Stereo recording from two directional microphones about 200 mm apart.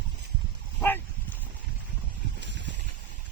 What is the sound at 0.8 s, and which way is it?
Dog, 10° left (ahead or behind).